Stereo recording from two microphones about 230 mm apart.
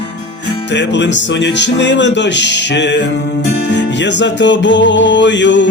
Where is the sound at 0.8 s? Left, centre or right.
Left.